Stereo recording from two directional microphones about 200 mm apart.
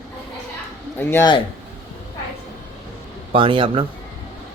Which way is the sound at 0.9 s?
10° left (ahead or behind).